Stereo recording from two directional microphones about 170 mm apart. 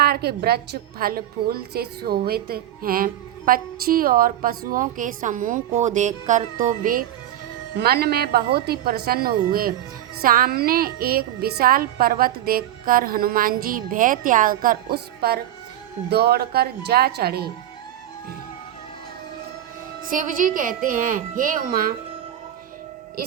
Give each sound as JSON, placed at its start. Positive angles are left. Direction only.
{"t": 0.0, "sound": "a woman's voice", "side_deg": -65}
{"t": 7.8, "sound": "a woman's voice", "side_deg": -70}
{"t": 20.1, "sound": "a woman's voice", "side_deg": -50}